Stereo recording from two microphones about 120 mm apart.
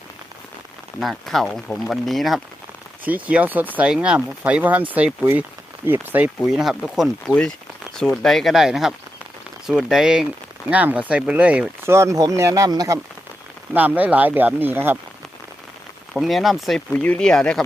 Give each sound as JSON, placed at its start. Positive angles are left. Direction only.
{"t": 0.9, "sound": "speech", "side_deg": 0}
{"t": 3.0, "sound": "speech", "side_deg": -15}
{"t": 6.4, "sound": "speech", "side_deg": 0}
{"t": 11.9, "sound": "speech", "side_deg": -25}
{"t": 13.7, "sound": "speech", "side_deg": -15}
{"t": 16.1, "sound": "speech", "side_deg": 0}
{"t": 16.9, "sound": "speech", "side_deg": 10}